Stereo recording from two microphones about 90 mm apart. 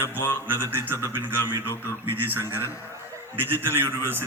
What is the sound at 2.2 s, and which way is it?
A man's voice, 25° right (ahead or behind).